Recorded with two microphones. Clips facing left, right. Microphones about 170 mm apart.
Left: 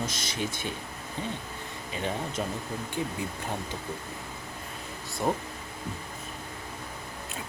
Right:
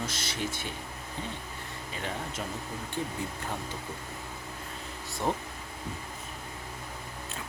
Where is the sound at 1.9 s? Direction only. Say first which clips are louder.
Left 5 dB; 20° left (ahead or behind).